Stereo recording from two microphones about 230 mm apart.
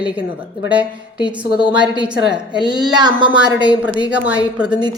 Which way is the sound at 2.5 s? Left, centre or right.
Centre.